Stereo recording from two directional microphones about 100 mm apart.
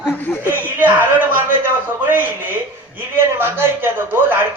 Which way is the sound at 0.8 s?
20° right (ahead or behind).